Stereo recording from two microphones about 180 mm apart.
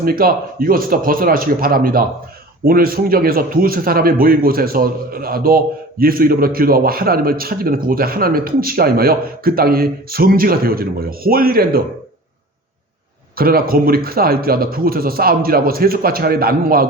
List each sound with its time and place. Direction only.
0.0 s speech: 55° right (ahead or behind)
13.3 s speech: 55° right (ahead or behind)